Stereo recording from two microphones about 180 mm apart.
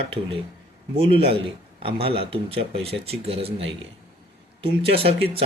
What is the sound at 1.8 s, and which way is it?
Speech, 30° right (ahead or behind).